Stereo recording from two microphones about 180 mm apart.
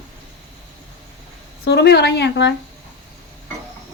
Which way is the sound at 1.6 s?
65° left (ahead or behind).